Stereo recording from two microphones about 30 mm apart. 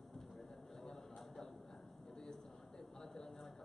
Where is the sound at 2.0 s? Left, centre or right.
Left.